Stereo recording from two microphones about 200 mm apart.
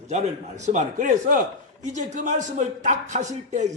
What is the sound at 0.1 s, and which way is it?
Speech, 35° right (ahead or behind).